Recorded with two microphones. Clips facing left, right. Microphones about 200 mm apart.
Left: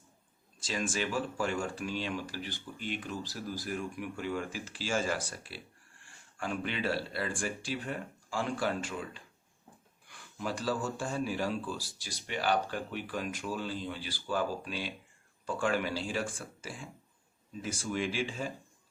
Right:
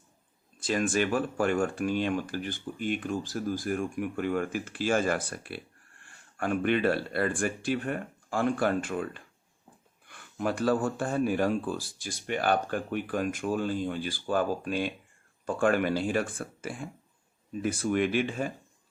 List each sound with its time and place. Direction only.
0.6 s speech: 55° right (ahead or behind)